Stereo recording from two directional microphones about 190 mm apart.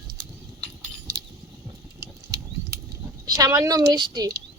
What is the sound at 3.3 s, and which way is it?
A woman's voice, 20° right (ahead or behind).